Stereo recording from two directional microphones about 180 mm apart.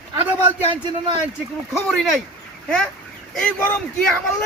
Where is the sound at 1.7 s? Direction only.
Centre (ahead or behind).